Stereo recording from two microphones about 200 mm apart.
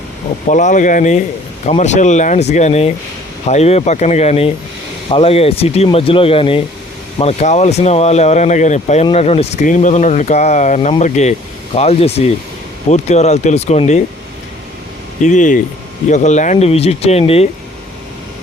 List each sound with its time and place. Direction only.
0.4 s speech: 40° left (ahead or behind)
15.2 s speech: 40° left (ahead or behind)